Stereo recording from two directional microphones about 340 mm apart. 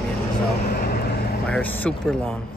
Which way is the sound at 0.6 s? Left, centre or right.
Left.